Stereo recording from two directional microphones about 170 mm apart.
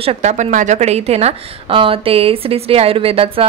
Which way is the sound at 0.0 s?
40° right (ahead or behind).